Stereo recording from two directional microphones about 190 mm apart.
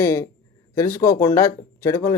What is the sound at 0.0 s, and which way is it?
Speech, 15° left (ahead or behind).